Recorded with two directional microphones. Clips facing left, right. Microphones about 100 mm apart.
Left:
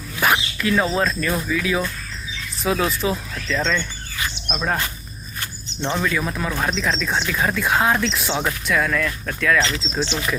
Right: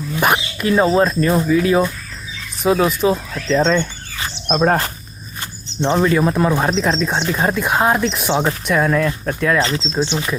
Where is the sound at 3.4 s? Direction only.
35° right (ahead or behind).